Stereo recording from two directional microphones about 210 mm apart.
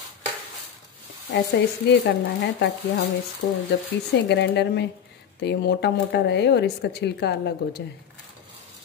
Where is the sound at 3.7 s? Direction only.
55° left (ahead or behind).